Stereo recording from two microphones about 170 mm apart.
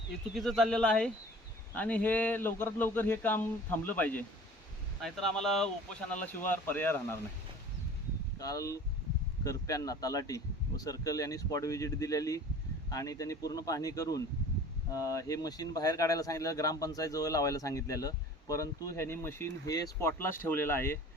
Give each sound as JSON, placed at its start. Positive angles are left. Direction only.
{"t": 0.3, "sound": "speech", "side_deg": 5}
{"t": 8.4, "sound": "speech", "side_deg": 20}